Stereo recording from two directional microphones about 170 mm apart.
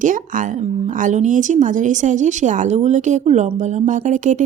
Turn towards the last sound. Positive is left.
turn(degrees=-45)  # may be behind; listen again after turning